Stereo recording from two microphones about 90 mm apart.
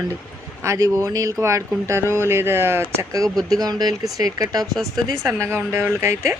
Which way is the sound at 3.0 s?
40° right (ahead or behind).